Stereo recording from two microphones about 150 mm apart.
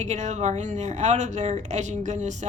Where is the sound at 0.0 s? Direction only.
50° right (ahead or behind).